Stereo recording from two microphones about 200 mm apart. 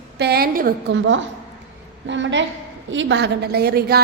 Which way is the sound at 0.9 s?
70° right (ahead or behind).